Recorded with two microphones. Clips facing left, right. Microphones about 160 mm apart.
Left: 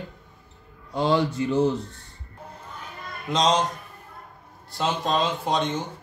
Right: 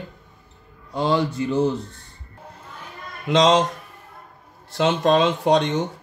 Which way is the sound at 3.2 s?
90° right.